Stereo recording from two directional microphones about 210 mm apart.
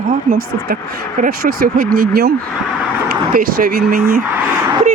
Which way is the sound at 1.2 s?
45° right (ahead or behind).